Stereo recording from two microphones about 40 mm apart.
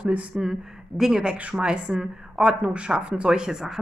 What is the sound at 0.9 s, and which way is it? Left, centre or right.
Speech, right.